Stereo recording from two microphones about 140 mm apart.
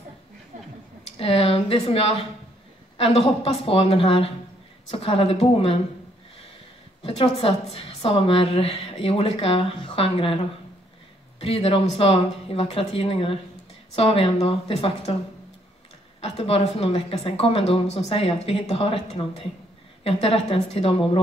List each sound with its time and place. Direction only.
1.0 s a woman's voice: 45° left (ahead or behind)
7.0 s a woman's voice: 45° left (ahead or behind)
16.2 s a woman's voice: 45° left (ahead or behind)